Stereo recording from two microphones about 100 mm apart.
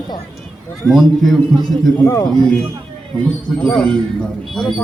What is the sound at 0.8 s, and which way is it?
A man's voice, centre (ahead or behind).